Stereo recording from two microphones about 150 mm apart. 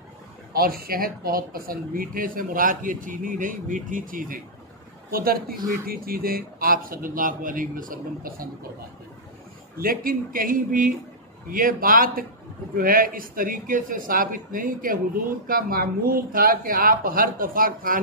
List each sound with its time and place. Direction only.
0.5 s speech: 80° right; by 4.4 s 65° right (ahead or behind)
5.1 s speech: 80° right
9.8 s speech: 75° right (ahead or behind)